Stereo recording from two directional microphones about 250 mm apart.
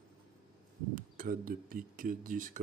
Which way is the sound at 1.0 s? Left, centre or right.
Right.